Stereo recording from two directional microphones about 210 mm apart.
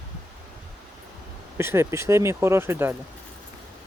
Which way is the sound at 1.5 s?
10° right (ahead or behind).